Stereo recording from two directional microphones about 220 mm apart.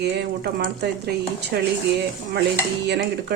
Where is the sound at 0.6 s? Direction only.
50° right (ahead or behind).